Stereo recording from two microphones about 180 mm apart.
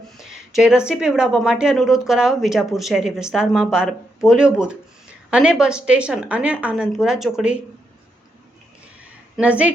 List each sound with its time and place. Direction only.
0.2 s a sound: centre (ahead or behind)
0.9 s a woman's voice: 5° right (ahead or behind)
9.4 s a woman's voice: 10° right (ahead or behind)